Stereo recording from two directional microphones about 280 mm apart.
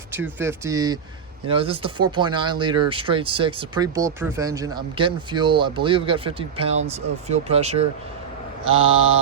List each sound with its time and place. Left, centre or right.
0.1 s speech: centre